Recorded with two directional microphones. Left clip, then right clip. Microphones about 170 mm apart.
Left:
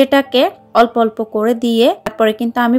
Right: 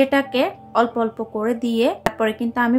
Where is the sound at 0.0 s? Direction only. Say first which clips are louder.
Left 6 dB; 35° left (ahead or behind).